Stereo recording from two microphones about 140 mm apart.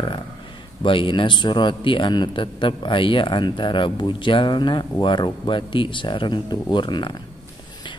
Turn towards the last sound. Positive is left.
turn(degrees=35)  # may be behind; listen again after turning